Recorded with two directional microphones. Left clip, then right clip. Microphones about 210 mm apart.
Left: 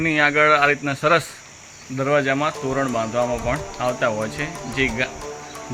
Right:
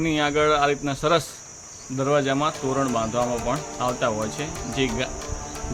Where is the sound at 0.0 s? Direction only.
Centre (ahead or behind).